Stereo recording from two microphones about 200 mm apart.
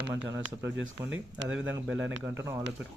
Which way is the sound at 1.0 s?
70° right (ahead or behind).